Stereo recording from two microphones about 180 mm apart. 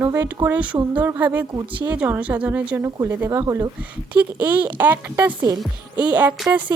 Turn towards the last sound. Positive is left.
turn(degrees=-5)  # may be behind; listen again after turning